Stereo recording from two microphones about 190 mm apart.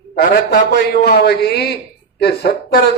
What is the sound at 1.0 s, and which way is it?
A man's voice, 60° left (ahead or behind).